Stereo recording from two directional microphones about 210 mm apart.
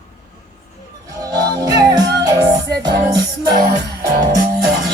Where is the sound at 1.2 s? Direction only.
15° right (ahead or behind).